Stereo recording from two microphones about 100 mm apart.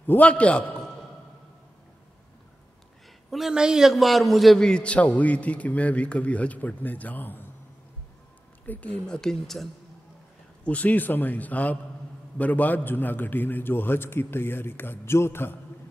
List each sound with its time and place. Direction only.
0.0 s a man's voice: 15° left (ahead or behind)
3.3 s a man's voice: 5° right (ahead or behind); by 7.4 s 20° left (ahead or behind)
8.6 s a man's voice: 15° left (ahead or behind)
10.6 s a man's voice: 15° left (ahead or behind)